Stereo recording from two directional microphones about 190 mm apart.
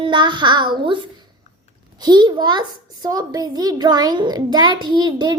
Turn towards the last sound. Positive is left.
turn(degrees=-20)  # may be behind; listen again after turning